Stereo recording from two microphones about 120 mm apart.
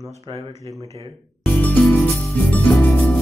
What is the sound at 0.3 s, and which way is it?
Speech, 40° right (ahead or behind).